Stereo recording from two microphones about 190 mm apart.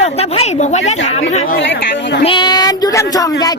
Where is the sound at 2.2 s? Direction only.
25° left (ahead or behind).